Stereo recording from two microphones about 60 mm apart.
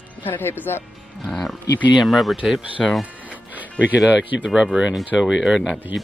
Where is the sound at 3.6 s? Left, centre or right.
Right.